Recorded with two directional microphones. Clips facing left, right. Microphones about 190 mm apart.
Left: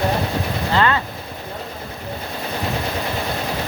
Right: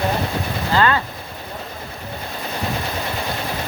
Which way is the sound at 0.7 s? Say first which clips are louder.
Right 1 dB; 25° left (ahead or behind).